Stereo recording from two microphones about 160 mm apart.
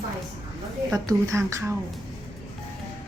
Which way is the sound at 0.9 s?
20° right (ahead or behind).